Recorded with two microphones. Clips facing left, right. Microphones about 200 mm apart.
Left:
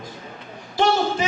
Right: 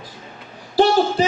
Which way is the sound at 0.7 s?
35° right (ahead or behind).